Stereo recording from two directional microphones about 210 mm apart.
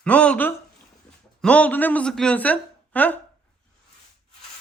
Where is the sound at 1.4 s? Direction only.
5° left (ahead or behind).